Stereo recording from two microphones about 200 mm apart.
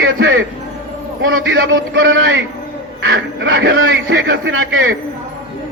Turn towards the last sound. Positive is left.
turn(degrees=-65)  # may be behind; listen again after turning